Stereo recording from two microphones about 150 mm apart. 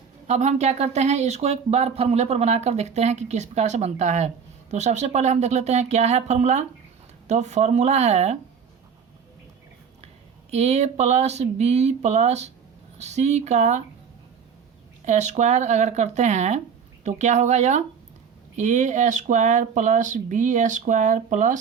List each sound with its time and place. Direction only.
0.3 s speech: 50° right (ahead or behind)
10.5 s speech: 45° right (ahead or behind)
15.0 s speech: 50° right (ahead or behind)